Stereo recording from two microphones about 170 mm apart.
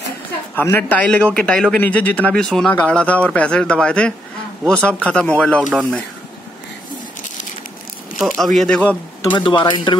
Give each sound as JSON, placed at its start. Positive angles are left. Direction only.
{"t": 0.6, "sound": "a man's voice", "side_deg": 10}
{"t": 8.2, "sound": "speech", "side_deg": 0}
{"t": 9.4, "sound": "speech", "side_deg": 25}